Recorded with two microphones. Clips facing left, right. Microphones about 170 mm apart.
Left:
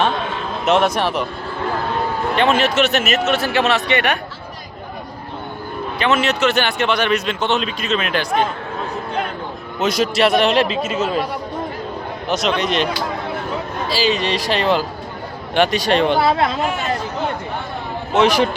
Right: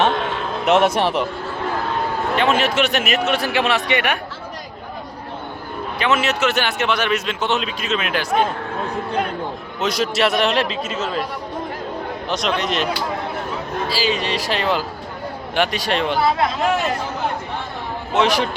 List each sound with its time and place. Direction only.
0.7 s speech: 20° right (ahead or behind)
2.3 s a man's voice: 5° right (ahead or behind)
6.0 s a man's voice: 5° right (ahead or behind)
9.8 s a man's voice: centre (ahead or behind)
10.9 s speech: 15° left (ahead or behind)
12.3 s a man's voice: centre (ahead or behind)
13.9 s a man's voice: 5° right (ahead or behind)
18.1 s a man's voice: centre (ahead or behind)